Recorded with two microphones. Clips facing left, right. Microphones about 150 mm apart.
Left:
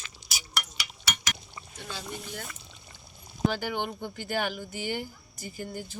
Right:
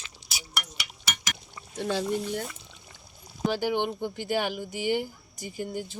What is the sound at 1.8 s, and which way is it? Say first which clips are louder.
Speech: right 12 dB; 75° right (ahead or behind).